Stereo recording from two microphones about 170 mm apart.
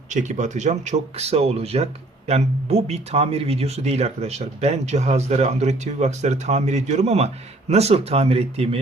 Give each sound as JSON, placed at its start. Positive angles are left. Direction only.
{"t": 0.1, "sound": "speech", "side_deg": -45}